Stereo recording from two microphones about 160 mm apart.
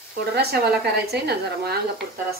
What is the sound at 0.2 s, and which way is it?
Speech, 80° right.